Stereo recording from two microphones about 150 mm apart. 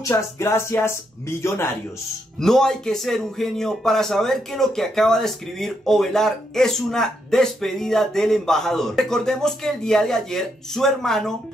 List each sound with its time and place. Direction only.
0.1 s music: 15° left (ahead or behind)
2.4 s speech: 5° left (ahead or behind)